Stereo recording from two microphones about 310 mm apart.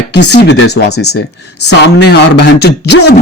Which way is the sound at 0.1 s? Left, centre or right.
Left.